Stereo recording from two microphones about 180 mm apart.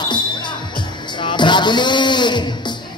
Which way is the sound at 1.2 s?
25° left (ahead or behind).